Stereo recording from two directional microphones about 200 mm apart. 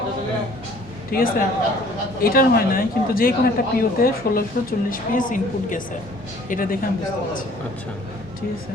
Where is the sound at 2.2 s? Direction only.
50° left (ahead or behind).